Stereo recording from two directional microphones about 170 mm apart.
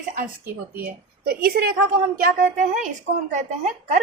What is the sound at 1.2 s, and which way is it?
Speech, 65° right (ahead or behind).